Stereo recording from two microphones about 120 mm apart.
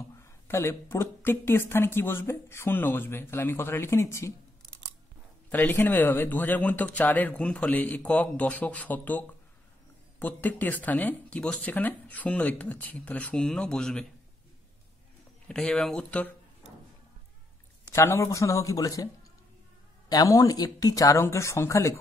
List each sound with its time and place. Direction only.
0.1 s a woman's voice: 25° left (ahead or behind)
5.5 s speech: 15° left (ahead or behind)
15.4 s speech: 5° left (ahead or behind)
17.8 s a woman's voice: 25° left (ahead or behind)
20.1 s a woman's voice: 30° left (ahead or behind)